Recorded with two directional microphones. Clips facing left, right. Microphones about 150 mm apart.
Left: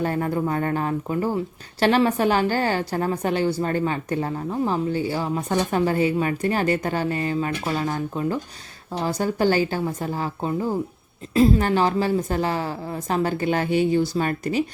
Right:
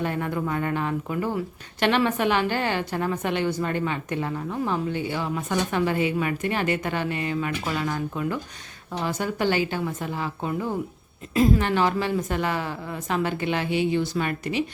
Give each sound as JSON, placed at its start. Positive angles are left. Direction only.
{"t": 0.0, "sound": "speech", "side_deg": 40}